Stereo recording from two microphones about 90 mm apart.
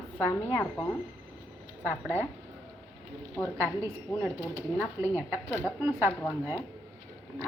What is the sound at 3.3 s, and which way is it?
Speech, 25° left (ahead or behind).